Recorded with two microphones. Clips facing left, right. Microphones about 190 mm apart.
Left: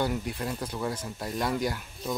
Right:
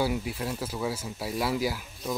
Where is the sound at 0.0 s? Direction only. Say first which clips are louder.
Right 1 dB; 5° right (ahead or behind).